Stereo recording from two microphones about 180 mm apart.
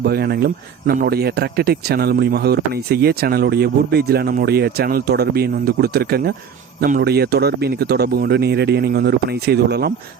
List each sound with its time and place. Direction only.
0.0 s speech: 60° right (ahead or behind)